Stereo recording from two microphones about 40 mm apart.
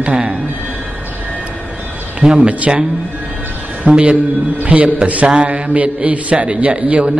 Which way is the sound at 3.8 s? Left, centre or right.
Right.